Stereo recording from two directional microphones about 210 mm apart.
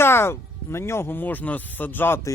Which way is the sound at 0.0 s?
10° left (ahead or behind).